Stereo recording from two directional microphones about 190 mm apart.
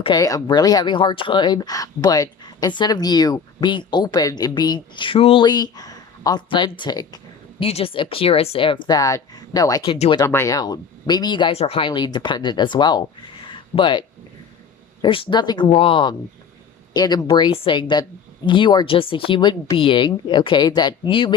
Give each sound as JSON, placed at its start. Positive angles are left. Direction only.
{"t": 0.0, "sound": "speech", "side_deg": 20}
{"t": 10.2, "sound": "speech", "side_deg": 15}
{"t": 15.0, "sound": "speech", "side_deg": 25}